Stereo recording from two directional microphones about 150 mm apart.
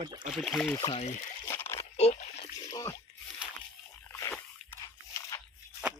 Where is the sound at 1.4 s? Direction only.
15° left (ahead or behind).